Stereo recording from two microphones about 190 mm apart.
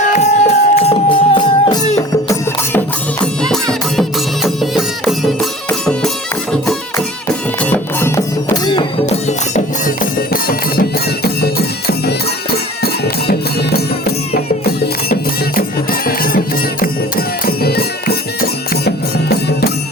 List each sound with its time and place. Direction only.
0.1 s music: 35° left (ahead or behind)
3.4 s music: 5° left (ahead or behind)
7.6 s music: 10° left (ahead or behind)
9.8 s music: 50° left (ahead or behind)